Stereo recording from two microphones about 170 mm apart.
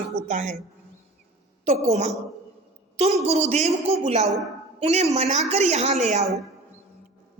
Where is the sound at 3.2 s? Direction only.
40° right (ahead or behind).